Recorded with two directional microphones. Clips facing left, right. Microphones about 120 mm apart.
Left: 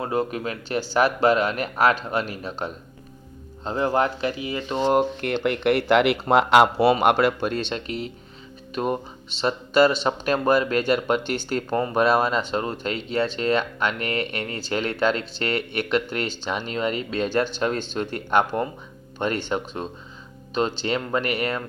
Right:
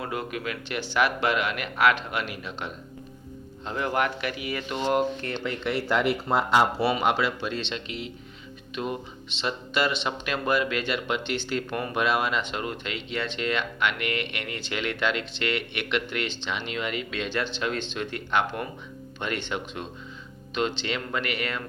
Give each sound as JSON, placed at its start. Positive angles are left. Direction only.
{"t": 0.0, "sound": "speech", "side_deg": 35}
{"t": 5.2, "sound": "speech", "side_deg": 60}
{"t": 7.0, "sound": "speech", "side_deg": 55}